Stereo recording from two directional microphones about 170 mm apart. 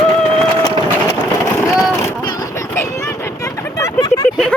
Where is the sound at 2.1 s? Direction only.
20° left (ahead or behind).